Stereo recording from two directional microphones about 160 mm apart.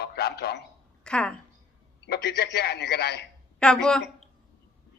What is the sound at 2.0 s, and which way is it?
A man's voice, 90° left.